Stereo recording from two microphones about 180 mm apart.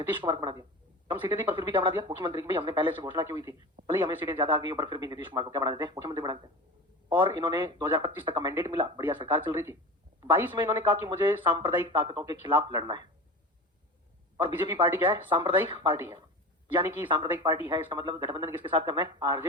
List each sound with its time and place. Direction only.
0.1 s speech: 25° right (ahead or behind)
14.3 s speech: 25° right (ahead or behind)